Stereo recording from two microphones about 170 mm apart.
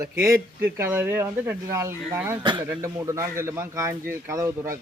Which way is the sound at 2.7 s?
15° right (ahead or behind).